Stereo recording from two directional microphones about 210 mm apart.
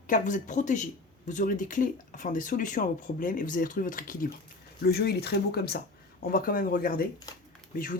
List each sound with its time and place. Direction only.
0.1 s speech: 35° left (ahead or behind)